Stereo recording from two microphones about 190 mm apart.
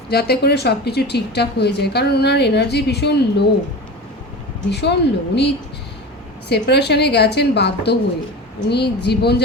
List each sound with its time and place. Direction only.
0.1 s a woman's voice: 55° left (ahead or behind)
4.7 s a woman's voice: 60° left (ahead or behind)
6.5 s a woman's voice: 60° left (ahead or behind)